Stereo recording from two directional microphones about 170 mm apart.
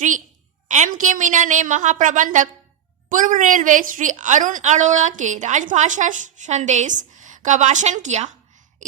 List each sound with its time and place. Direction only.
0.7 s a woman's voice: 45° right (ahead or behind)